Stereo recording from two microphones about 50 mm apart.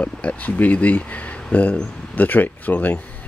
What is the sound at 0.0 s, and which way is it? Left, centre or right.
Speech, left.